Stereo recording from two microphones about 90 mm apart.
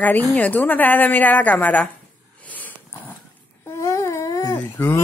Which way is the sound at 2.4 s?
20° left (ahead or behind).